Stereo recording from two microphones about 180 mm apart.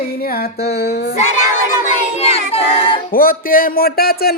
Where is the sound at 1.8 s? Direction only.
35° left (ahead or behind).